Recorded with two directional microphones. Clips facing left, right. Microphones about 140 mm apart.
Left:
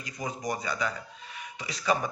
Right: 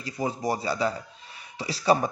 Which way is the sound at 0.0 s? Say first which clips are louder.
Right 6 dB; 30° right (ahead or behind).